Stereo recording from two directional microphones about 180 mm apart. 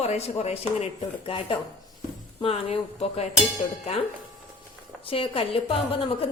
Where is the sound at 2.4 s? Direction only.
30° left (ahead or behind).